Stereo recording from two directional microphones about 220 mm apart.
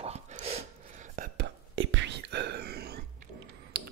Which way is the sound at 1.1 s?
50° right (ahead or behind).